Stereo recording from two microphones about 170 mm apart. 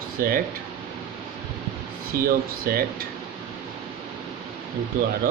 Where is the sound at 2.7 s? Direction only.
60° right (ahead or behind).